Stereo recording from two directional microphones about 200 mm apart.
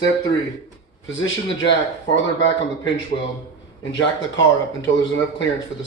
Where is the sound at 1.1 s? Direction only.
65° left (ahead or behind).